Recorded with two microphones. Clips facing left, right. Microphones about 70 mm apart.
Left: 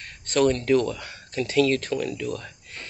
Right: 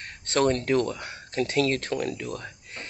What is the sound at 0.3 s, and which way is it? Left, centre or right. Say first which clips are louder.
Speech: left 3 dB; right.